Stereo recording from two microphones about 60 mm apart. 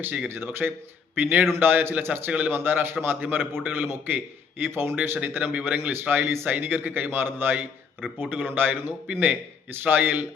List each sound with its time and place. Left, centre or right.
0.3 s a man's voice: right
6.2 s speech: right
6.5 s a man's voice: right